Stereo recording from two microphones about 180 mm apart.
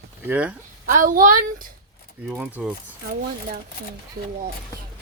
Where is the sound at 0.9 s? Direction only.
50° right (ahead or behind).